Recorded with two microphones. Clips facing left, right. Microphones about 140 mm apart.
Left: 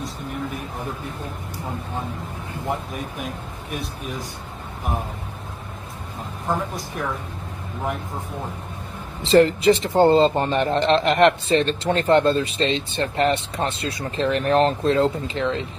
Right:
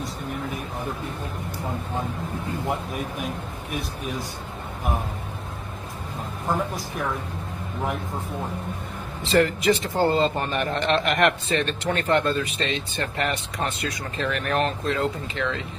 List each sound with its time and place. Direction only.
9.2 s a man's voice: 30° left (ahead or behind)